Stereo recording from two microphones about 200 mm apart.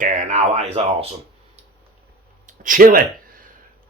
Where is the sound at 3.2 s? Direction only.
45° right (ahead or behind).